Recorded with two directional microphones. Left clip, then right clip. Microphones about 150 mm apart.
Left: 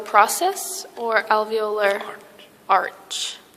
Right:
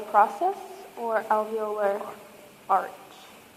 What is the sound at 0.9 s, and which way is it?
A woman's voice, 85° left.